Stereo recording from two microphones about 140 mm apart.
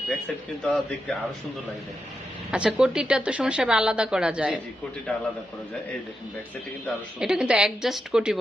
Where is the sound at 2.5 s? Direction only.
10° right (ahead or behind).